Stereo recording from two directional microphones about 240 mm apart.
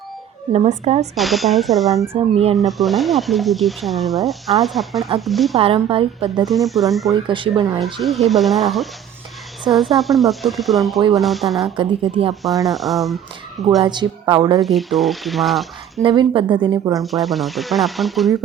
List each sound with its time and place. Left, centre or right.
0.5 s speech: right
1.1 s speech: centre
2.1 s speech: right
2.6 s speech: centre
5.5 s speech: right
6.5 s speech: centre
7.1 s speech: centre
8.0 s speech: centre
11.8 s speech: right
12.6 s speech: centre
13.8 s a woman's voice: centre
14.6 s speech: centre
16.0 s speech: centre
17.0 s speech: centre